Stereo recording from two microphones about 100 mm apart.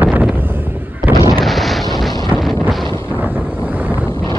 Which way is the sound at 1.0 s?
Centre (ahead or behind).